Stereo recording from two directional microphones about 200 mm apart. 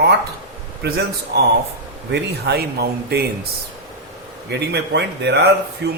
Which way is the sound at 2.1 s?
55° right (ahead or behind).